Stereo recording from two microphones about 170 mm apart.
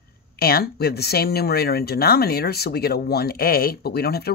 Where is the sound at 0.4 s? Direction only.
65° left (ahead or behind).